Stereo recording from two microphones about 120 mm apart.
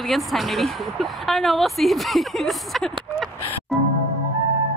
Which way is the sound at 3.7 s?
Centre (ahead or behind).